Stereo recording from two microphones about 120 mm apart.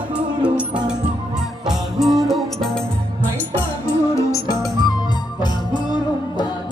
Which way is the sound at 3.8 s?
25° left (ahead or behind).